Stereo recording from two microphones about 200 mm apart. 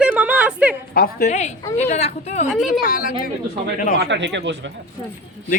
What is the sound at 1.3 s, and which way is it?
Speech, 35° left (ahead or behind).